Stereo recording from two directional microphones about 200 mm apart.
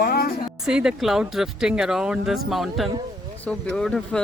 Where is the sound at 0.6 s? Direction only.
5° right (ahead or behind).